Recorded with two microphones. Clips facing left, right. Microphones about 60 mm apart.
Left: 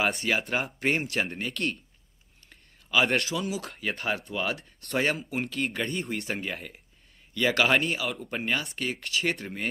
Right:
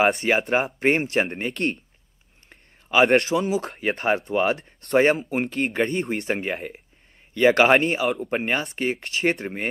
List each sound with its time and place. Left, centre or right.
0.0 s speech: right
0.7 s speech: right